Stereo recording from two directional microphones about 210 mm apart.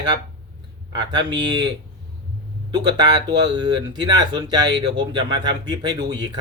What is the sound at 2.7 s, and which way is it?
Speech, 20° right (ahead or behind).